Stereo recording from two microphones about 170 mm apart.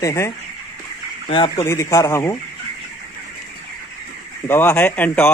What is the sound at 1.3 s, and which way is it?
Speech, 30° left (ahead or behind).